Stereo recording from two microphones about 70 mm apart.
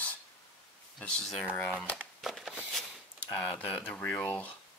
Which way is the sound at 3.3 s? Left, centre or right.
Centre.